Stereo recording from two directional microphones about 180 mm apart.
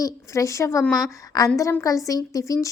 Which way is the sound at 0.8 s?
Centre (ahead or behind).